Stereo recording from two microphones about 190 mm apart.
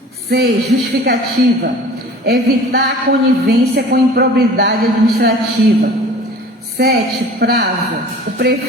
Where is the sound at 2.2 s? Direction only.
55° right (ahead or behind).